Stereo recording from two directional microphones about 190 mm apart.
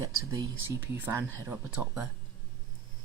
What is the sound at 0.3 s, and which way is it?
Speech, 15° right (ahead or behind).